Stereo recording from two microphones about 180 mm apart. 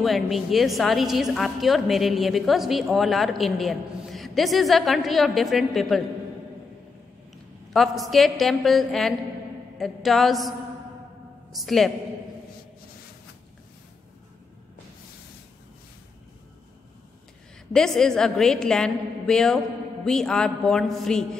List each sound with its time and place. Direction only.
0.0 s a woman's voice: centre (ahead or behind)
7.7 s a woman's voice: centre (ahead or behind)
11.5 s a woman's voice: centre (ahead or behind)
17.7 s a woman's voice: 5° left (ahead or behind)